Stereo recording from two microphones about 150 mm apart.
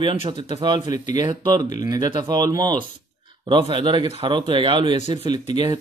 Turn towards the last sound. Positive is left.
turn(degrees=-30)  # may be behind; listen again after turning